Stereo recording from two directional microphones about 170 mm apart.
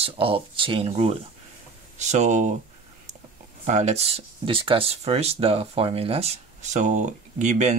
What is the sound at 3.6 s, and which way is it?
Speech, 40° right (ahead or behind).